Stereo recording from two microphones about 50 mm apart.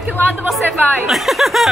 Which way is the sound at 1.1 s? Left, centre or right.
Centre.